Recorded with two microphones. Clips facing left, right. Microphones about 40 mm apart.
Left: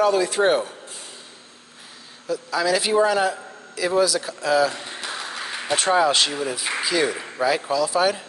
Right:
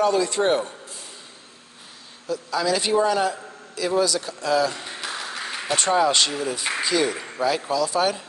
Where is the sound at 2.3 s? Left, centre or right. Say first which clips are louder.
Left 2 dB; centre.